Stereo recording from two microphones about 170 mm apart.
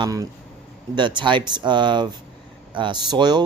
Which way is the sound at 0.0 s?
20° right (ahead or behind).